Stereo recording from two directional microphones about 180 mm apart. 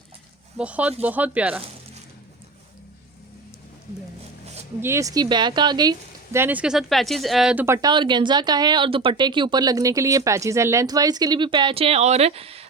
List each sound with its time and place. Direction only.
0.5 s speech: 5° right (ahead or behind)
4.8 s speech: 15° right (ahead or behind); by 12.6 s 35° right (ahead or behind)